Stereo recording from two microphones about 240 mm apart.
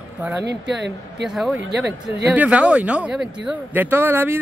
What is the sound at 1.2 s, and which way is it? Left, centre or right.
Speech, centre.